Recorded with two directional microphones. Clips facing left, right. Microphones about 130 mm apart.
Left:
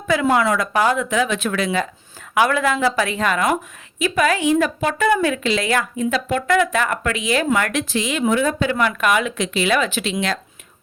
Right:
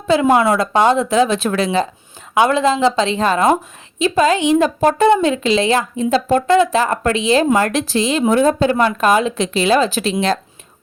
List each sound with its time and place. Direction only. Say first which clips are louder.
0.1 s a woman's voice: right 4 dB; 25° right (ahead or behind)
4.8 s speech: right 6 dB; 35° right (ahead or behind)